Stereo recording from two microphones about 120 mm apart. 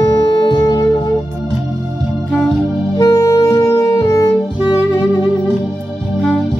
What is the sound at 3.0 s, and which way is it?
Music, 30° left (ahead or behind).